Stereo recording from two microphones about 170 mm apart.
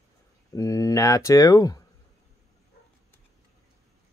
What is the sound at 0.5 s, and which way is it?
Speech, 20° left (ahead or behind).